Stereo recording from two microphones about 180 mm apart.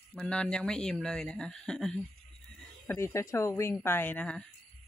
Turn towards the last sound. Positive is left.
turn(degrees=5)  # may be behind; listen again after turning